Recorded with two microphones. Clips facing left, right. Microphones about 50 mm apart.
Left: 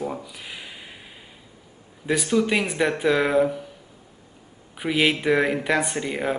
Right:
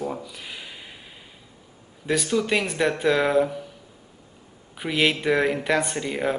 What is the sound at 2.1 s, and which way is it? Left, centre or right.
Speech, centre.